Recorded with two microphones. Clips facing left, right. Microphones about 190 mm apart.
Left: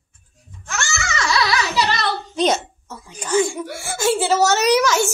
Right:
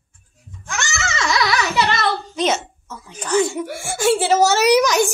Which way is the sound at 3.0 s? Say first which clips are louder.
Right 1 dB; 10° left (ahead or behind).